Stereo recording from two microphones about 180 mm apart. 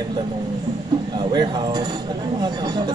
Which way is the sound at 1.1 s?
25° right (ahead or behind).